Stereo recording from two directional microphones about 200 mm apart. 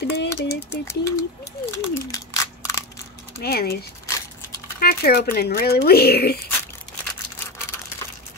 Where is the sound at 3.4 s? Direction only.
50° left (ahead or behind).